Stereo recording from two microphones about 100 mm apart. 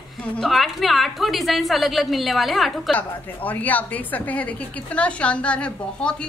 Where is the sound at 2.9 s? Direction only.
15° left (ahead or behind).